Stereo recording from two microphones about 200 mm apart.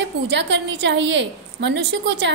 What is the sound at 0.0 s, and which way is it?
A woman's voice, 60° right (ahead or behind).